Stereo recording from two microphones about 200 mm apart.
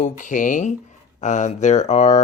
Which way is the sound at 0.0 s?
40° left (ahead or behind).